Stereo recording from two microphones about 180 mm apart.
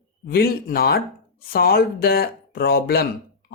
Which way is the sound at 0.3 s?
55° left (ahead or behind).